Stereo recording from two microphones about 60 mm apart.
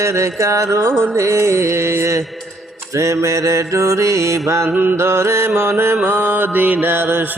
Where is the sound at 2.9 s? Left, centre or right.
Right.